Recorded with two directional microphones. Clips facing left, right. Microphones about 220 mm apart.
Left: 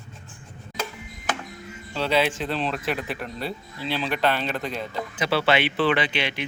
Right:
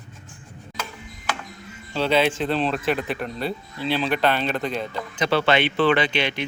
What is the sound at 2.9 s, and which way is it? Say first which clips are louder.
Speech: right 4 dB; 5° left (ahead or behind).